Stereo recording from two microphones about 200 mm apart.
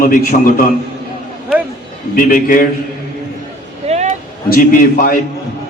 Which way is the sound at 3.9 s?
35° right (ahead or behind).